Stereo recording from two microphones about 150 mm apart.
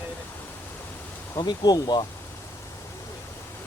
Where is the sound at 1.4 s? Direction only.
25° left (ahead or behind).